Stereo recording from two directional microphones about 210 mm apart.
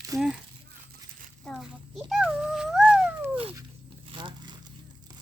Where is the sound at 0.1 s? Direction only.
15° right (ahead or behind).